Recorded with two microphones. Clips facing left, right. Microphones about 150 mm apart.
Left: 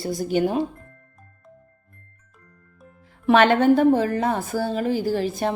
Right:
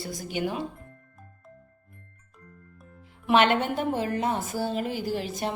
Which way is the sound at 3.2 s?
40° left (ahead or behind).